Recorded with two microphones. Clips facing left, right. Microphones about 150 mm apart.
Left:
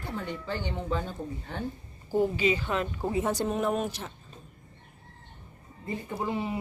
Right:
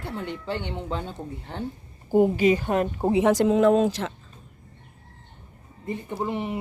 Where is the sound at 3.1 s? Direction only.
90° right.